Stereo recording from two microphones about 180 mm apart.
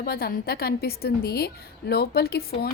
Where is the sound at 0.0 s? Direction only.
60° left (ahead or behind).